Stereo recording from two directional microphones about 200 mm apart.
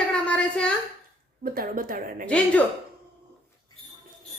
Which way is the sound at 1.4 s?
45° right (ahead or behind).